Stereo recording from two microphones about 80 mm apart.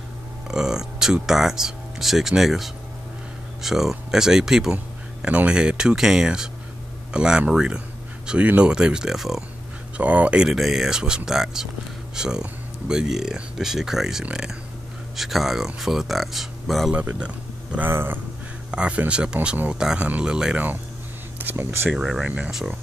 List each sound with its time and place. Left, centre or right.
0.5 s speech: centre
4.7 s speech: centre
9.9 s speech: centre
16.9 s speech: centre
17.7 s speech: right
18.7 s speech: centre
21.4 s speech: right
21.9 s speech: centre
22.2 s speech: centre